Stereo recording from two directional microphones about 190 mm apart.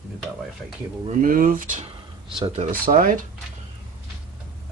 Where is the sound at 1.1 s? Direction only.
45° right (ahead or behind).